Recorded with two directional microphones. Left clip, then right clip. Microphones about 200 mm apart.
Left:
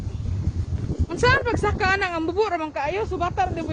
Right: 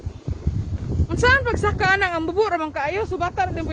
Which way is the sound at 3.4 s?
Centre (ahead or behind).